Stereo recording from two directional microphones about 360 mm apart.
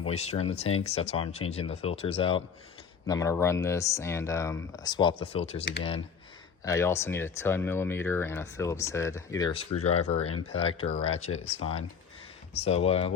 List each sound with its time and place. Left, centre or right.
0.0 s speech: centre
6.7 s speech: centre
12.5 s speech: centre